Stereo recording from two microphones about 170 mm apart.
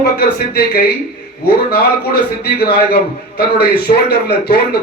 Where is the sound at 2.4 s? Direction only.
70° left (ahead or behind).